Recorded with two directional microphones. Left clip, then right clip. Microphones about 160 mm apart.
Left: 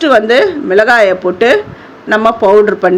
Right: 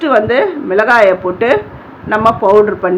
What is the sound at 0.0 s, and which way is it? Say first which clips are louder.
A woman's voice: left 3 dB; 30° left (ahead or behind).